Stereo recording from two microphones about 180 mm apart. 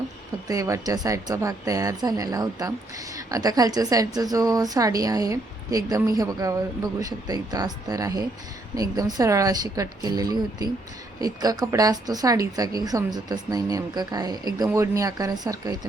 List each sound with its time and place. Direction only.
0.4 s a woman's voice: 20° right (ahead or behind)